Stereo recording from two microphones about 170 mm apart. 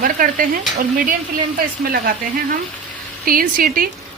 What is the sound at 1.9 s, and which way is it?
A woman's voice, 55° right (ahead or behind).